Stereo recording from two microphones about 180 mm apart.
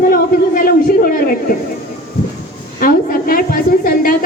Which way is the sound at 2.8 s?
50° left (ahead or behind).